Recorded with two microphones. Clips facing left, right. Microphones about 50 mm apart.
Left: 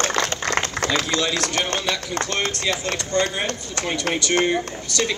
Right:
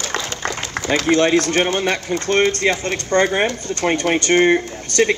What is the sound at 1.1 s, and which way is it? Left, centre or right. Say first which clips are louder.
Speech: right 7 dB; right.